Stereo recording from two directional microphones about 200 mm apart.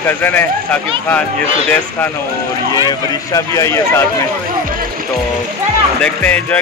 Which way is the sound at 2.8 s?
15° left (ahead or behind).